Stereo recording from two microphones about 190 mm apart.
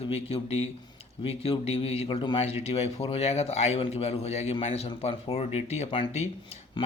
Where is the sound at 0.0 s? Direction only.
30° left (ahead or behind).